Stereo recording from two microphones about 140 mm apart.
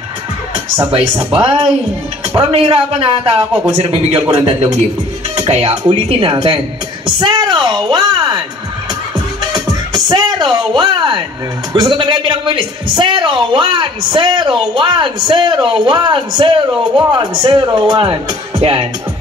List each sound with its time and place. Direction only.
1.3 s a woman's voice: 40° right (ahead or behind)
7.2 s a sound: 35° right (ahead or behind)
9.5 s music: 30° right (ahead or behind)
11.7 s a woman's voice: 30° right (ahead or behind)